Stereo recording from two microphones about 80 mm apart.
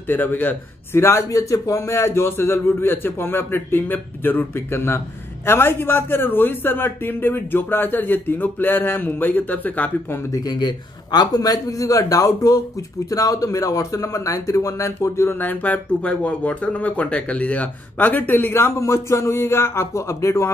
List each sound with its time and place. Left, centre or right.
0.1 s speech: left
10.3 s a man's voice: left
15.4 s speech: left